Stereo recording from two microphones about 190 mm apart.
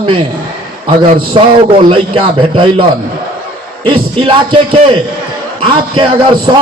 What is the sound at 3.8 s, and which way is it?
Speech, 25° right (ahead or behind).